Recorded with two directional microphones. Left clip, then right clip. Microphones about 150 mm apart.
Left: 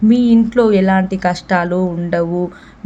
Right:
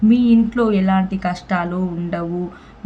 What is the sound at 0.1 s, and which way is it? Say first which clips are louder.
A woman's voice: left 4 dB; 30° left (ahead or behind).